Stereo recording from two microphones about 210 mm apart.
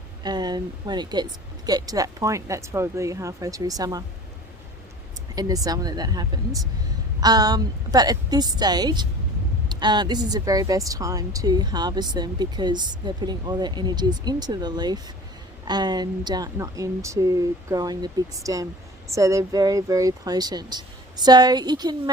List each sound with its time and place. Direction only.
0.2 s speech: 20° right (ahead or behind)
5.3 s a woman's voice: 15° right (ahead or behind)